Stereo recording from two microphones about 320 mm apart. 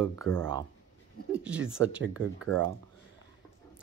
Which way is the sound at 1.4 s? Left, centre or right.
Centre.